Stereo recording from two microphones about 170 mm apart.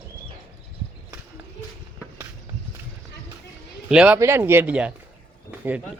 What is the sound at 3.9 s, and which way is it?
Speech, 5° right (ahead or behind).